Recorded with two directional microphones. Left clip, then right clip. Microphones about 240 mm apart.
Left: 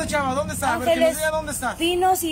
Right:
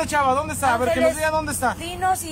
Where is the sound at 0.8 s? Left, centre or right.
Centre.